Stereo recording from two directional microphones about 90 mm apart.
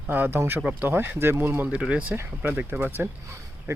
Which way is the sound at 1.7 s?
10° right (ahead or behind).